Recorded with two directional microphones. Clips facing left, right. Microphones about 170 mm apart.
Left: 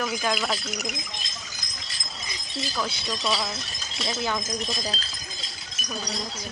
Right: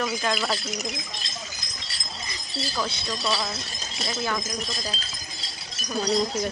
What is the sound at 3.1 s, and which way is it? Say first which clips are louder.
Speech: even; 15° left (ahead or behind).